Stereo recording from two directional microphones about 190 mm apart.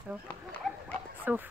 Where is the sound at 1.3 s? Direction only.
10° right (ahead or behind).